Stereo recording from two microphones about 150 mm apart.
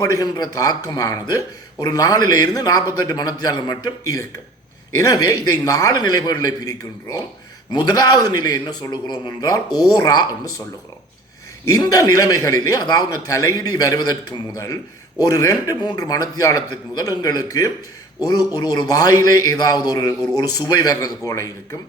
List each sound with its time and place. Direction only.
0.0 s a man's voice: 25° left (ahead or behind)
7.7 s a man's voice: 30° left (ahead or behind)
11.7 s a man's voice: 25° left (ahead or behind)